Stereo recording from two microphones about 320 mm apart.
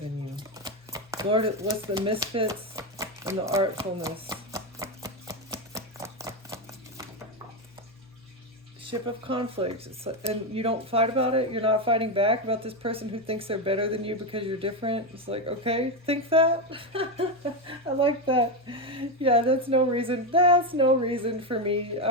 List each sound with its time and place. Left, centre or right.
0.3 s shuffling cards: centre
8.8 s speech: centre